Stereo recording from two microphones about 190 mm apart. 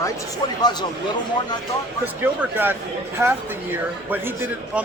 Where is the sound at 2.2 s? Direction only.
10° right (ahead or behind).